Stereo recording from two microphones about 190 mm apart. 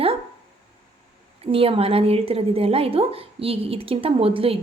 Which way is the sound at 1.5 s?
30° right (ahead or behind).